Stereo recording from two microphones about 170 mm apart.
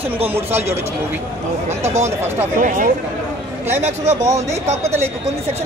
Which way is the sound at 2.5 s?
50° right (ahead or behind).